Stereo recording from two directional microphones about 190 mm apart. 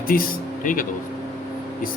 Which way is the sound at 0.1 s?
50° left (ahead or behind).